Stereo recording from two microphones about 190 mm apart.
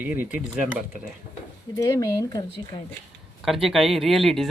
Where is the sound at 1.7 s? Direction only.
15° left (ahead or behind).